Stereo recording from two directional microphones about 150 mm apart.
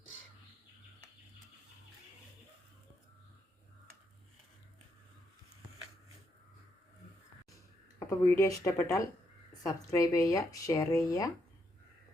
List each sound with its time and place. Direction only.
7.9 s speech: 20° left (ahead or behind)